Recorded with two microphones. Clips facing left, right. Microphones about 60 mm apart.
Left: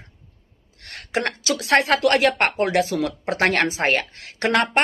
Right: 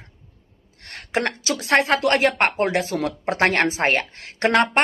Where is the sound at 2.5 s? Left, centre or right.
Right.